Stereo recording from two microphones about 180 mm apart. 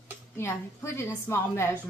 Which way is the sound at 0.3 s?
15° left (ahead or behind).